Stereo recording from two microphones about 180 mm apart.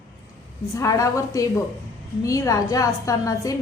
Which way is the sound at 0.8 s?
20° left (ahead or behind).